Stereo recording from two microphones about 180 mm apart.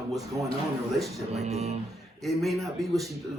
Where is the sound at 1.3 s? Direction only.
35° right (ahead or behind).